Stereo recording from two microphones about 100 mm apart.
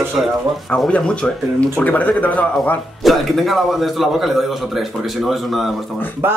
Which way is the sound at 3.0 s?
Centre (ahead or behind).